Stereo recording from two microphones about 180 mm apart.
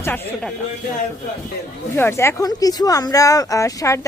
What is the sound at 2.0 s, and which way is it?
A woman's voice, 15° left (ahead or behind).